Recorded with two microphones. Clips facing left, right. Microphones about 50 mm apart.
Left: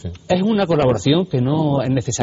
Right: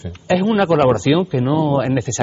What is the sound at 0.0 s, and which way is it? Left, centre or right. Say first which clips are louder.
A man's voice: right 1 dB; right.